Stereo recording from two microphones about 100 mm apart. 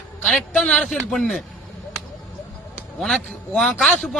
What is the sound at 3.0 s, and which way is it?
A man's voice, 5° left (ahead or behind).